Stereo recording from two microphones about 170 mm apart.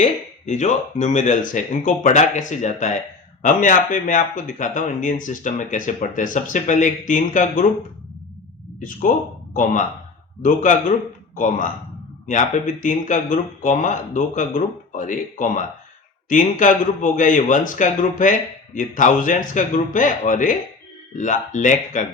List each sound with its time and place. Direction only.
0.0 s speech: 45° left (ahead or behind)
8.8 s speech: 50° left (ahead or behind)
10.4 s speech: 50° left (ahead or behind)